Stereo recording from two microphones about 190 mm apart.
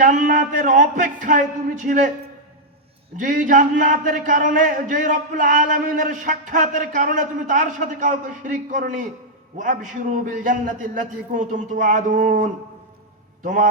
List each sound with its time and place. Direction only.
0.0 s a man's voice: 45° right (ahead or behind)
3.2 s a man's voice: 45° right (ahead or behind)